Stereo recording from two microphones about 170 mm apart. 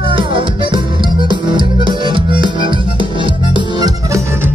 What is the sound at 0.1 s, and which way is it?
Music, 30° right (ahead or behind).